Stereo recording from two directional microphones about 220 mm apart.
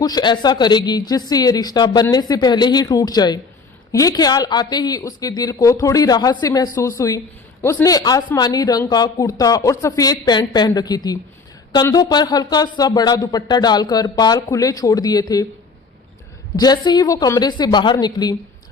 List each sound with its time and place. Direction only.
0.0 s speech: 20° left (ahead or behind)
16.6 s speech: 15° left (ahead or behind)